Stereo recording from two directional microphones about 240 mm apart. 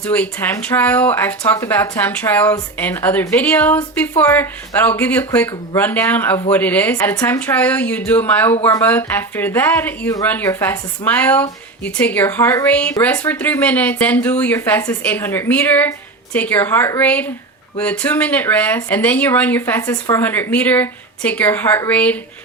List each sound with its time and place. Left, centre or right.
0.0 s a woman's voice: centre